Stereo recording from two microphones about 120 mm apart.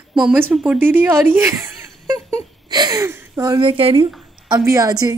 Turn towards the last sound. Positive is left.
turn(degrees=-30)  # may be behind; listen again after turning